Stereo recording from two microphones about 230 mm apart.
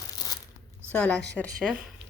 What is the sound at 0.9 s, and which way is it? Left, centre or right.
Speech, centre.